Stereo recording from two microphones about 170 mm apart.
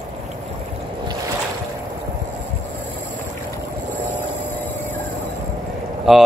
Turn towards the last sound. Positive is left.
turn(degrees=0)  # may be behind; listen again after turning